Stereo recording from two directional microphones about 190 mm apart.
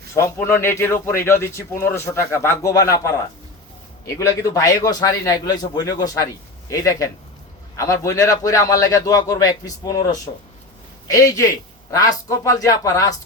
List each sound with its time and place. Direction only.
0.1 s a man's voice: 15° left (ahead or behind)